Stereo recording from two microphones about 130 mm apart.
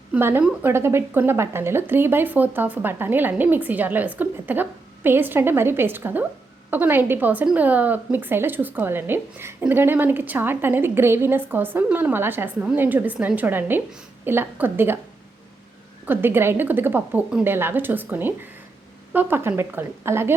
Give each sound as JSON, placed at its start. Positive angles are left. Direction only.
{"t": 0.1, "sound": "a woman's voice", "side_deg": -15}
{"t": 16.0, "sound": "a woman's voice", "side_deg": -15}